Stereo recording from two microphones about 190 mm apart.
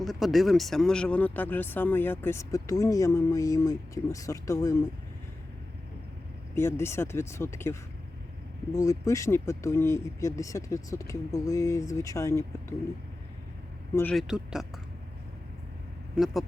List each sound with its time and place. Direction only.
0.0 s speech: centre (ahead or behind); by 4.8 s 15° left (ahead or behind)
6.6 s speech: 15° left (ahead or behind)
13.9 s speech: 5° left (ahead or behind)
16.1 s speech: centre (ahead or behind)